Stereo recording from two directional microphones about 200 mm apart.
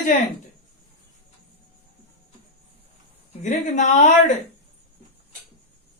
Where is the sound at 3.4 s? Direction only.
40° left (ahead or behind).